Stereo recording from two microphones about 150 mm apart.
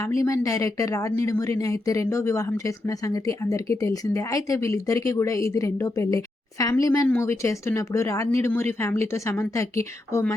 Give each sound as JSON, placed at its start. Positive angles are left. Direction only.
{"t": 0.0, "sound": "speech", "side_deg": 20}